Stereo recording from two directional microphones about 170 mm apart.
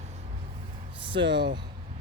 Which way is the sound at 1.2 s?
90° right.